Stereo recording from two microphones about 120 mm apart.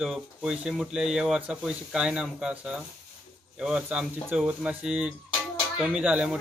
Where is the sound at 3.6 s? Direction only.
10° right (ahead or behind).